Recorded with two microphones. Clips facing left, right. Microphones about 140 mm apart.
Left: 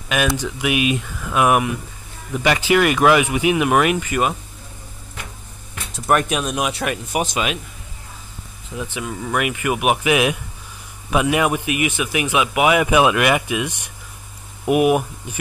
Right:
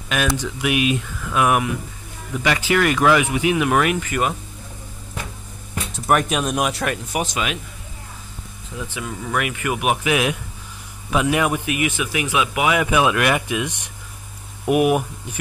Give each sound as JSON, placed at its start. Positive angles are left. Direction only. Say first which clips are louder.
{"t": 0.1, "sound": "speech", "louder": "left 2 dB", "side_deg": 5}
{"t": 1.2, "sound": "speech", "louder": "left 2 dB", "side_deg": 20}
{"t": 5.9, "sound": "speech", "louder": "left 1 dB", "side_deg": 0}
{"t": 7.1, "sound": "speech", "louder": "left 2 dB", "side_deg": 20}
{"t": 8.9, "sound": "speech", "louder": "left 1 dB", "side_deg": 15}
{"t": 14.7, "sound": "speech", "louder": "left 1 dB", "side_deg": 5}